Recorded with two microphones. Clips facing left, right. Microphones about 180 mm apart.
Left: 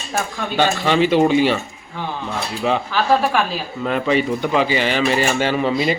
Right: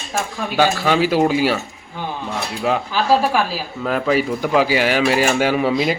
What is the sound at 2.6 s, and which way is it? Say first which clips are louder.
Speech: even; 10° right (ahead or behind).